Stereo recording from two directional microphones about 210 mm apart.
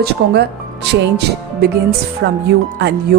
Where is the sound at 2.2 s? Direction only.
55° right (ahead or behind).